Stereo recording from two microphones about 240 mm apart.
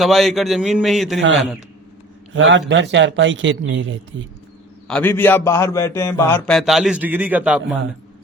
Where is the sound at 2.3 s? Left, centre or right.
Right.